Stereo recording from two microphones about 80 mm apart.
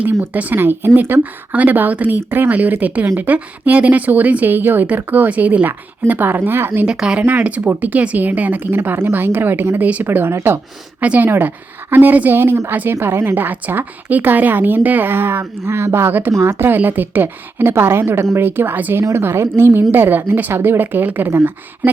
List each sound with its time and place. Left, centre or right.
0.0 s speech: right
6.8 s speech: centre; by 10.6 s right
11.0 s speech: centre